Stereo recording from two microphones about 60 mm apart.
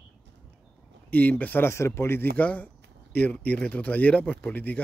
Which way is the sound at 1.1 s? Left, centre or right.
Left.